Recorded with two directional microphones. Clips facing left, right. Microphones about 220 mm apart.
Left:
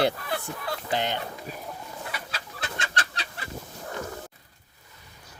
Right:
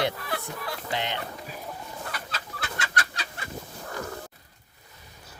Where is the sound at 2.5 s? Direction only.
25° left (ahead or behind).